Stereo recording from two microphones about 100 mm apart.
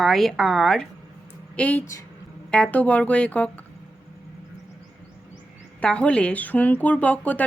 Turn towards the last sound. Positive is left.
turn(degrees=15)  # may be behind; listen again after turning